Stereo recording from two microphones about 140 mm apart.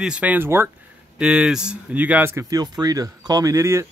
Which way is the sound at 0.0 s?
10° right (ahead or behind).